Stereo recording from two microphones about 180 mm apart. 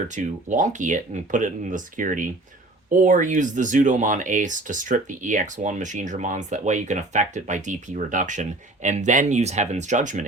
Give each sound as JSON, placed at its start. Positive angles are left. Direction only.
{"t": 0.2, "sound": "speech", "side_deg": -45}